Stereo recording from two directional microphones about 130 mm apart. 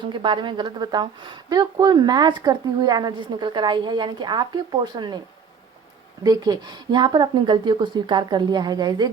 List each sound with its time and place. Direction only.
0.0 s speech: 40° right (ahead or behind)
6.2 s speech: 30° right (ahead or behind)